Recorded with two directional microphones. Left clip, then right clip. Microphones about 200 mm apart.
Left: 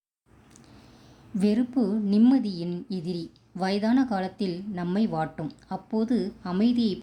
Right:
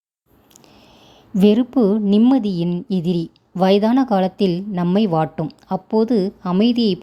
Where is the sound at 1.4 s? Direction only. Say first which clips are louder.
Right 11 dB; 35° right (ahead or behind).